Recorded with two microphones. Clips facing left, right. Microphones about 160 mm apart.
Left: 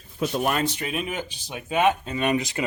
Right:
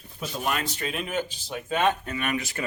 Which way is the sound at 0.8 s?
10° left (ahead or behind).